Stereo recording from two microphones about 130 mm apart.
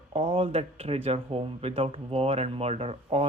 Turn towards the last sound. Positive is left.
turn(degrees=-50)  # may be behind; listen again after turning